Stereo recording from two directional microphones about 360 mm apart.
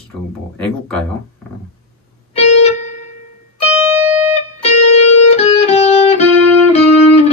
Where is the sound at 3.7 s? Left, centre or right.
Centre.